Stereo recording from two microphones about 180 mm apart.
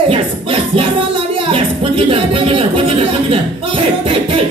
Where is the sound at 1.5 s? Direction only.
30° right (ahead or behind).